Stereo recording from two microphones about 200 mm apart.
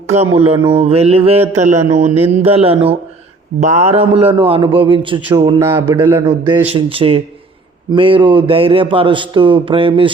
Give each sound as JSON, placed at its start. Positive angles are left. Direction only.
{"t": 0.3, "sound": "a man's voice", "side_deg": -30}
{"t": 5.5, "sound": "speech", "side_deg": -10}
{"t": 6.2, "sound": "a man's voice", "side_deg": -25}